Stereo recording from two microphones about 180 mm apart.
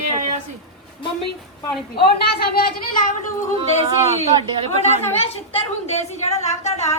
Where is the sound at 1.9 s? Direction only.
60° left (ahead or behind).